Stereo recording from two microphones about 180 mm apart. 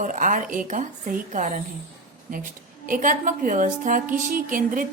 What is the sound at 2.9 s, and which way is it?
A woman's voice, 45° right (ahead or behind).